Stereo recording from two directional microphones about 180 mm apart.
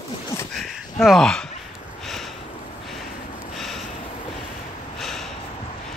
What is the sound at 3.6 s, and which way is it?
Snort, centre (ahead or behind).